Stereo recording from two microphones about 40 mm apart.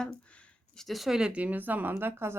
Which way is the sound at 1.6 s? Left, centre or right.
Right.